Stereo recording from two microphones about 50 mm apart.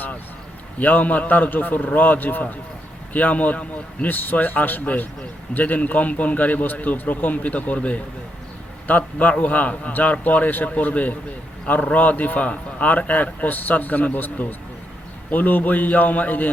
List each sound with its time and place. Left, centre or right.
0.8 s a man's voice: left